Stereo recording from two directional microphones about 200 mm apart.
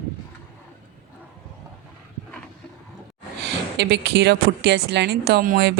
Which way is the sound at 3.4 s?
55° right (ahead or behind).